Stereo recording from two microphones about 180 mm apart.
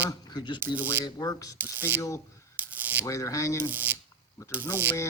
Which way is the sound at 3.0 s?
15° left (ahead or behind).